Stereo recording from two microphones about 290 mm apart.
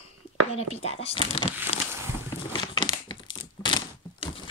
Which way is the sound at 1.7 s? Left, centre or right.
Left.